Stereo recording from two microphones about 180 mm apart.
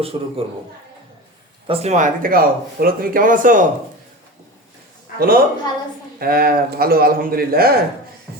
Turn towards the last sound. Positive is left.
turn(degrees=-55)  # may be behind; listen again after turning